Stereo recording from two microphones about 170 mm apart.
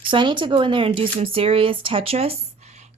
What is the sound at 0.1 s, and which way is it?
A woman's voice, 30° right (ahead or behind).